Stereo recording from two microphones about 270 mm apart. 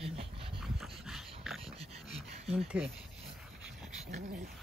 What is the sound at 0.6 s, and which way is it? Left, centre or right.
Dog, centre.